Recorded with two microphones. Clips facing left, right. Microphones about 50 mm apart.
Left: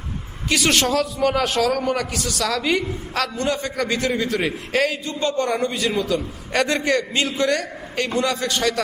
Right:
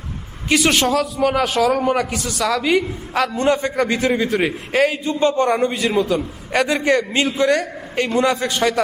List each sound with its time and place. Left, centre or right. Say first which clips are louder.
0.4 s a woman's voice: right 4 dB; centre
0.7 s speech: right 2 dB; centre
1.8 s speech: right 4 dB; centre
3.3 s a man's voice: right 6 dB; right
6.6 s speech: right 3 dB; centre
6.9 s a man's voice: right 3 dB; right